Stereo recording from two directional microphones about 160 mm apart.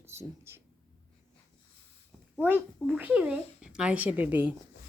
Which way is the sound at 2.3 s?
10° right (ahead or behind).